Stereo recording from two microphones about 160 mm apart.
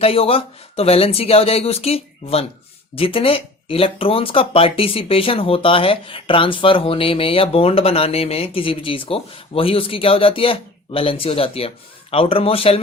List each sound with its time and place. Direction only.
0.0 s speech: 35° left (ahead or behind)